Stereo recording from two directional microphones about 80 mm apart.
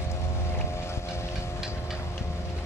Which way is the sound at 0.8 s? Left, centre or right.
Left.